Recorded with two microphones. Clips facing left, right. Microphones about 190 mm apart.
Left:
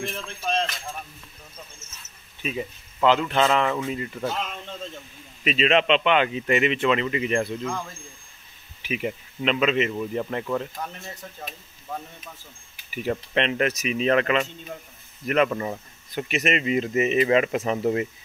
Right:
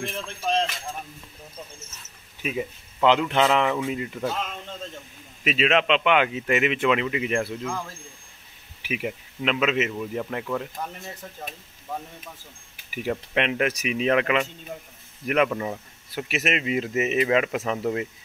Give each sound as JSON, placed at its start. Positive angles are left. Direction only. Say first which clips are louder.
{"t": 2.4, "sound": "speech", "louder": "right 1 dB", "side_deg": -10}
{"t": 8.8, "sound": "speech", "louder": "left 1 dB", "side_deg": -5}
{"t": 12.9, "sound": "speech", "louder": "left 1 dB", "side_deg": -10}